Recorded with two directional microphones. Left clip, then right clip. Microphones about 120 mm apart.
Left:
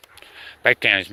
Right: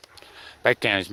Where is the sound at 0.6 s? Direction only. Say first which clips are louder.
Left 4 dB; 55° right (ahead or behind).